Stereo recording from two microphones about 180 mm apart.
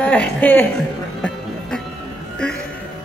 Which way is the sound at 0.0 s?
5° left (ahead or behind).